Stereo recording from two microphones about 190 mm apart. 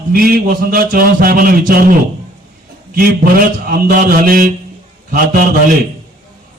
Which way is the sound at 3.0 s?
50° right (ahead or behind).